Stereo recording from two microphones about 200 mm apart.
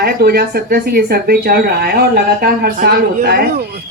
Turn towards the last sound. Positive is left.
turn(degrees=-50)  # may be behind; listen again after turning